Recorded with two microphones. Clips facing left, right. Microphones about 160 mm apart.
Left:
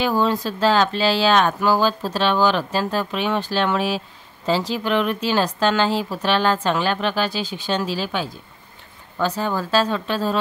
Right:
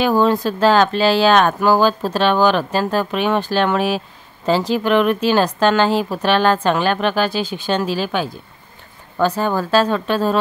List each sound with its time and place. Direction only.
0.0 s speech: 50° right (ahead or behind)